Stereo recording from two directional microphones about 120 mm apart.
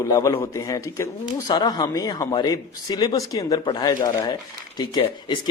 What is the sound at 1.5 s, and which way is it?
A man's voice, 35° left (ahead or behind).